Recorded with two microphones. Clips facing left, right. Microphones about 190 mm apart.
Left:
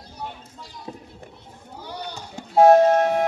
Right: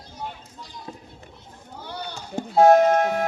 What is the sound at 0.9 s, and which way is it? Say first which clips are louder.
Children playing: left 3 dB; 20° left (ahead or behind).